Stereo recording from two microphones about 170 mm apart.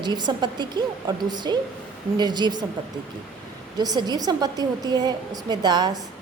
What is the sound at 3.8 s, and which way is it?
A woman's voice, 25° right (ahead or behind).